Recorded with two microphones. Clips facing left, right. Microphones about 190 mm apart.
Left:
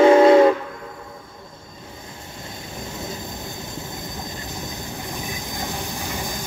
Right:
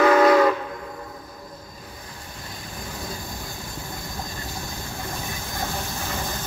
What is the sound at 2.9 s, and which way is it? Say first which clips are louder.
Train: left 2 dB; 20° left (ahead or behind).